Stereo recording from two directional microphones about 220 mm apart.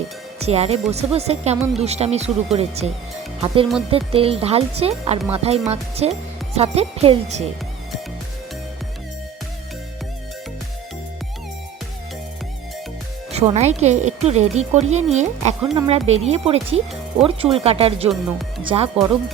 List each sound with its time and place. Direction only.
0.3 s speech: 30° right (ahead or behind)
13.3 s speech: 30° right (ahead or behind)